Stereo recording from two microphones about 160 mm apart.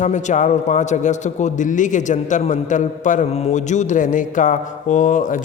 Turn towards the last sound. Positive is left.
turn(degrees=55)  # may be behind; listen again after turning